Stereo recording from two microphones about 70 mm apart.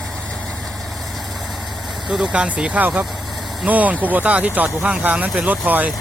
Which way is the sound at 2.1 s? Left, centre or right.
Centre.